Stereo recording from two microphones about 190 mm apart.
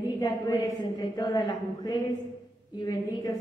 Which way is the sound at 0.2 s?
15° left (ahead or behind).